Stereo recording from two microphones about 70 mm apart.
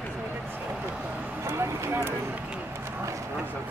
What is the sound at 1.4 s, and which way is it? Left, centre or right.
Clip-clop, right.